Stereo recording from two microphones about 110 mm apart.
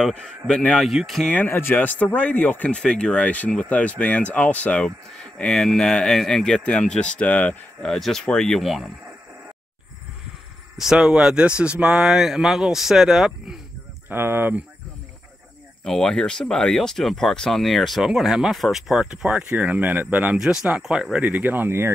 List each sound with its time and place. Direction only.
0.0 s speech: 5° left (ahead or behind)
1.3 s speech: 20° left (ahead or behind); by 8.9 s centre (ahead or behind)
10.8 s speech: 5° right (ahead or behind)
14.0 s speech: 20° right (ahead or behind)
15.8 s speech: 5° left (ahead or behind); by 21.9 s 20° right (ahead or behind)